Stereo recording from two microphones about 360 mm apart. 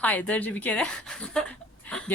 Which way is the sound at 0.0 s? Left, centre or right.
Centre.